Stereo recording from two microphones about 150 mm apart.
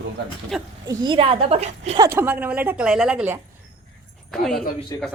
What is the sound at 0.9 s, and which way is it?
A woman's voice, 30° right (ahead or behind).